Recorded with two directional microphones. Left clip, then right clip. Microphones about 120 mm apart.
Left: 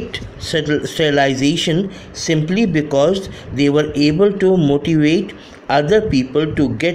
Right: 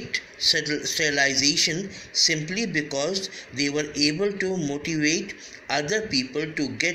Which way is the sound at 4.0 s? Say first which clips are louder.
Left 8 dB; 50° left (ahead or behind).